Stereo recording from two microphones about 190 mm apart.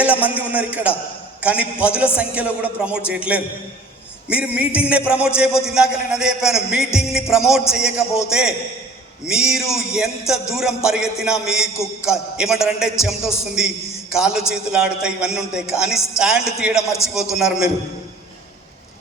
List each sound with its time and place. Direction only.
0.0 s speech: 5° right (ahead or behind)
5.2 s music: 5° right (ahead or behind)